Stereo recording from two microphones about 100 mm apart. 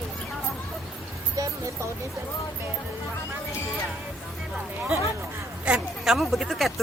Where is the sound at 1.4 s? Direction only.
35° right (ahead or behind).